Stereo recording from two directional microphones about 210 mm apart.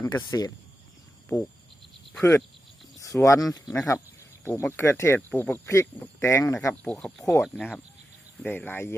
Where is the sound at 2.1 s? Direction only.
10° left (ahead or behind).